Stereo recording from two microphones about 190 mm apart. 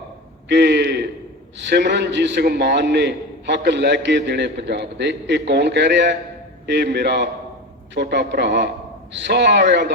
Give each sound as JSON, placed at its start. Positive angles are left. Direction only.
{"t": 0.4, "sound": "a man's voice", "side_deg": -65}